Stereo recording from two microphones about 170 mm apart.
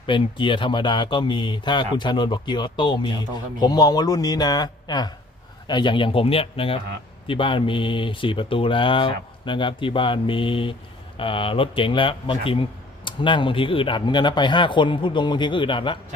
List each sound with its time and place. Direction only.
0.0 s speech: 30° left (ahead or behind)